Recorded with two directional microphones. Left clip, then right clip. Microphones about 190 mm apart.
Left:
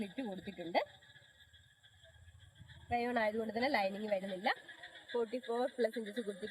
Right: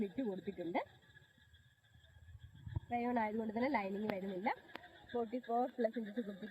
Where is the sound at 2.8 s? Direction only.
35° left (ahead or behind).